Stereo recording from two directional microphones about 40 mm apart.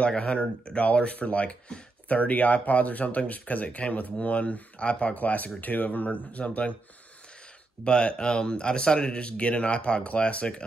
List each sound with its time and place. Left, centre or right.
0.2 s speech: left
7.8 s speech: left